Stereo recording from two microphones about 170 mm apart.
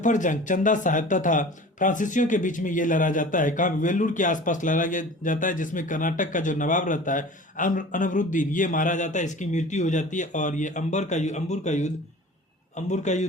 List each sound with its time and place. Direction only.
0.0 s speech: 50° left (ahead or behind)